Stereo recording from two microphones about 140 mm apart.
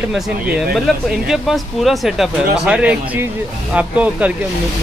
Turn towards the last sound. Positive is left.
turn(degrees=-10)  # may be behind; listen again after turning